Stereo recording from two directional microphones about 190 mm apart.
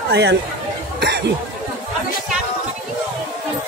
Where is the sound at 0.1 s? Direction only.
65° right (ahead or behind).